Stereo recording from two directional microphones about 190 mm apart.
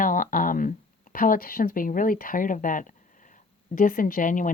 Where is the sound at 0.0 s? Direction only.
45° left (ahead or behind).